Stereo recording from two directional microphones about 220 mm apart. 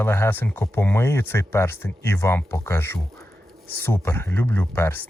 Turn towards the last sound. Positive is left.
turn(degrees=10)  # may be behind; listen again after turning